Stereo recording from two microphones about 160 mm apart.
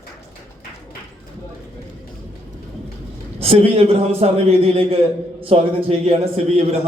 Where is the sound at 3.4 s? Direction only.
40° right (ahead or behind).